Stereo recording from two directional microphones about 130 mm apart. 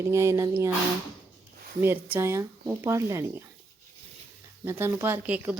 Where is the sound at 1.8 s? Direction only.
15° right (ahead or behind).